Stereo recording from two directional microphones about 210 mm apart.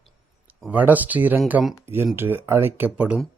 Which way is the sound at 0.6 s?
5° right (ahead or behind).